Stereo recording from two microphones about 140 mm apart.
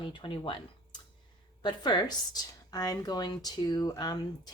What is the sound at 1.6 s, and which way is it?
A woman's voice, 30° left (ahead or behind).